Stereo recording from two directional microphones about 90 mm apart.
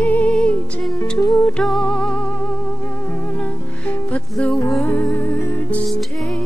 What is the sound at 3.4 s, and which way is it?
Music, 15° left (ahead or behind).